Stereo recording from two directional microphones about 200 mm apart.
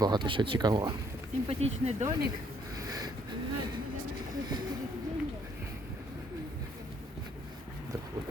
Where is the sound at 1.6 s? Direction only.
35° right (ahead or behind).